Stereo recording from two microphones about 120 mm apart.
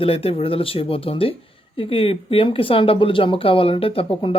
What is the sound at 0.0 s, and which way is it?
Speech, 50° left (ahead or behind).